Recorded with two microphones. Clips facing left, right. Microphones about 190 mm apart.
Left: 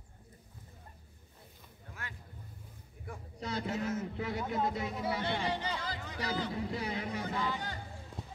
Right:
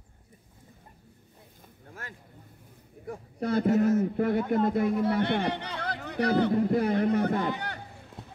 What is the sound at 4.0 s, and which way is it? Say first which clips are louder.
A man's voice: right 11 dB; 55° right (ahead or behind).